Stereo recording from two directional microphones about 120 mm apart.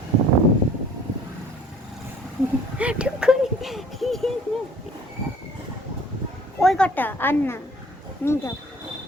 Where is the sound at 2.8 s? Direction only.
10° right (ahead or behind).